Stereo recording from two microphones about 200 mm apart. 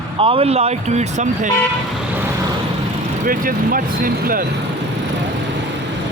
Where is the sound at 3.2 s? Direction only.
45° right (ahead or behind).